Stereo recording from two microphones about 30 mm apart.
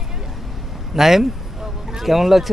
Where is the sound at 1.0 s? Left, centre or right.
Centre.